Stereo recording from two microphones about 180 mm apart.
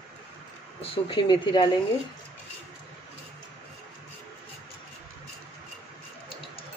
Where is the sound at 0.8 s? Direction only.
30° left (ahead or behind).